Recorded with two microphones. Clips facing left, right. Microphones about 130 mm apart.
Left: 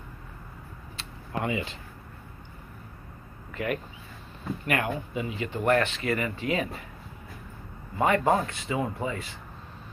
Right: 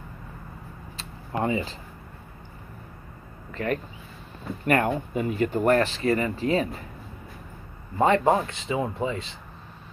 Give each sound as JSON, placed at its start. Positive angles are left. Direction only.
{"t": 0.9, "sound": "a sound", "side_deg": -35}
{"t": 3.5, "sound": "speech", "side_deg": -35}
{"t": 8.0, "sound": "speech", "side_deg": -25}